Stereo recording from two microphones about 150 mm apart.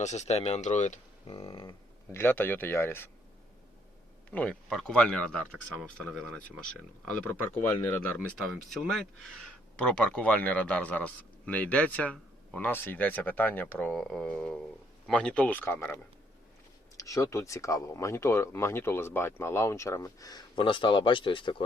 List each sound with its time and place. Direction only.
0.0 s speech: 50° left (ahead or behind)
1.3 s a sound: 35° left (ahead or behind)
2.1 s a man's voice: 15° left (ahead or behind)
4.3 s a man's voice: 10° left (ahead or behind)
17.0 s speech: 20° left (ahead or behind)